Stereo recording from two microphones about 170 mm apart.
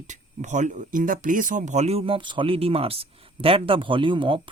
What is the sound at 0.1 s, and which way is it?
Speech, 45° right (ahead or behind).